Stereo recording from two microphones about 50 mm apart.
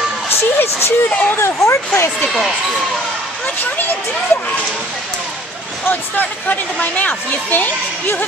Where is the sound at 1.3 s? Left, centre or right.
Left.